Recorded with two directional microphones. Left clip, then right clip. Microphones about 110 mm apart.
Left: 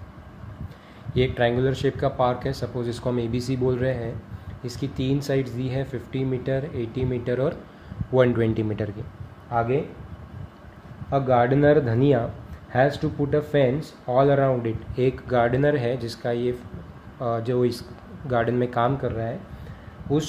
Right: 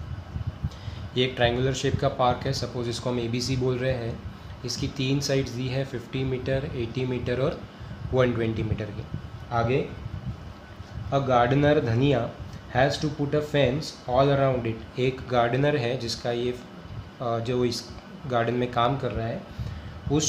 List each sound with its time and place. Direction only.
1.1 s speech: 60° left (ahead or behind)
8.1 s a man's voice: 75° left (ahead or behind)
9.5 s speech: 45° left (ahead or behind)
11.1 s speech: 50° left (ahead or behind)
12.7 s speech: 70° left (ahead or behind)
19.0 s speech: 45° left (ahead or behind)